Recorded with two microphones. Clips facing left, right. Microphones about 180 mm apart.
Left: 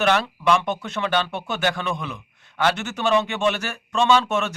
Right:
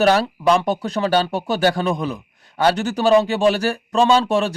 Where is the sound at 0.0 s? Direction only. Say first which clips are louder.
Right 5 dB; 35° right (ahead or behind).